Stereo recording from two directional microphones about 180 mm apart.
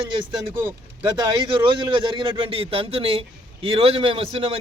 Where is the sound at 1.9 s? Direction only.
30° right (ahead or behind).